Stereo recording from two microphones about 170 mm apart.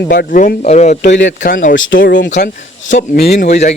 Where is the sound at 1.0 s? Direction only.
90° left.